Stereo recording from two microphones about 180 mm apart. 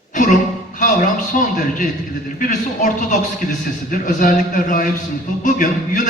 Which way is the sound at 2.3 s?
45° left (ahead or behind).